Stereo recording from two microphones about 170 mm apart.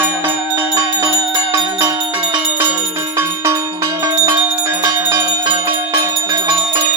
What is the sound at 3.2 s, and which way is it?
Music, 15° right (ahead or behind).